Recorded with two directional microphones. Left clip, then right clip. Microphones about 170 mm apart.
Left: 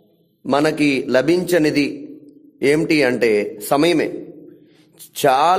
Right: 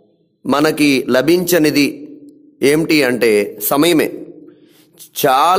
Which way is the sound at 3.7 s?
25° right (ahead or behind).